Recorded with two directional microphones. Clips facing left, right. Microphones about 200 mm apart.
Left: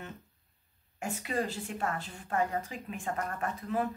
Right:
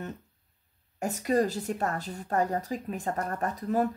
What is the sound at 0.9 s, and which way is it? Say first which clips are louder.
Speech: right 7 dB; 40° right (ahead or behind).